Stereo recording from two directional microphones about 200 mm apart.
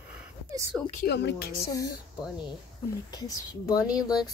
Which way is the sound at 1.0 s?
55° left (ahead or behind).